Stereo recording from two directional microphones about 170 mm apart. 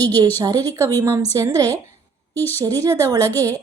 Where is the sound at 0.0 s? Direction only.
20° right (ahead or behind).